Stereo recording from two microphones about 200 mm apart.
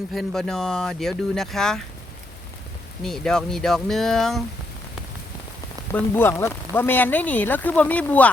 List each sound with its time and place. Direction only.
0.1 s speech: centre (ahead or behind)
3.0 s speech: 5° left (ahead or behind)
5.9 s speech: 10° left (ahead or behind)